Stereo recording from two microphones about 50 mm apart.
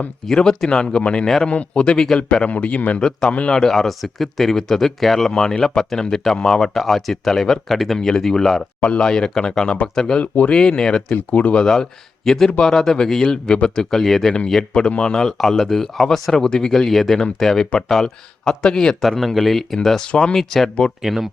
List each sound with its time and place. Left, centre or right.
0.3 s a man's voice: centre; by 3.0 s left
3.0 s speech: centre
7.9 s speech: centre
8.8 s speech: left
10.2 s speech: left
10.5 s speech: centre
11.1 s speech: left
11.6 s speech: centre
14.7 s speech: left
19.0 s speech: centre
20.1 s a man's voice: centre
20.3 s speech: centre
21.0 s speech: centre